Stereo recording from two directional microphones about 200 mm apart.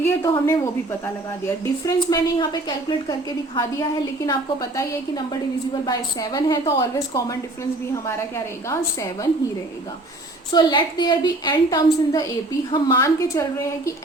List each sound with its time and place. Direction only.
0.0 s a woman's voice: 15° left (ahead or behind)
8.7 s a woman's voice: 15° left (ahead or behind)
10.5 s a woman's voice: 20° left (ahead or behind)